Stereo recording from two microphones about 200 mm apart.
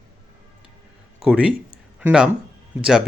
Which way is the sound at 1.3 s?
5° right (ahead or behind).